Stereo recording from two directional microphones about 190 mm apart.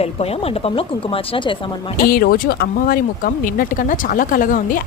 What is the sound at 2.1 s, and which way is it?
Speech, 50° left (ahead or behind).